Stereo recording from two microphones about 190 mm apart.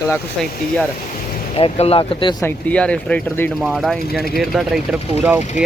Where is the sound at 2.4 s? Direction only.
10° left (ahead or behind).